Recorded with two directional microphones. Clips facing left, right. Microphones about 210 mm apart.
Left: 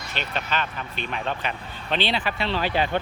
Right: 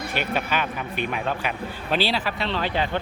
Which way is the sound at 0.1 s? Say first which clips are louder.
Right 2 dB; 10° right (ahead or behind).